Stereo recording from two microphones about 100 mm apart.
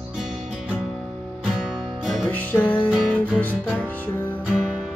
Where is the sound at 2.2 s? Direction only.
20° left (ahead or behind).